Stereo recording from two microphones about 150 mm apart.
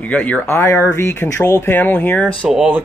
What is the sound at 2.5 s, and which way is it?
Speech, 5° right (ahead or behind).